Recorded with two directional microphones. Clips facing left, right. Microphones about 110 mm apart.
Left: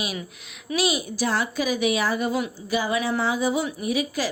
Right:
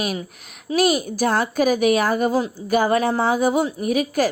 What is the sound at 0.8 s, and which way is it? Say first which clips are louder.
A woman's voice: right 6 dB; 45° right (ahead or behind).